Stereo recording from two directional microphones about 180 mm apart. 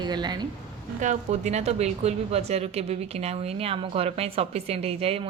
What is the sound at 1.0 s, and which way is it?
Speech, 40° right (ahead or behind).